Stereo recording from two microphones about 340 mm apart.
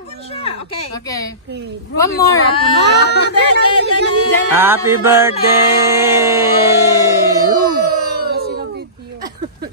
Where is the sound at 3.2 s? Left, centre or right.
Left.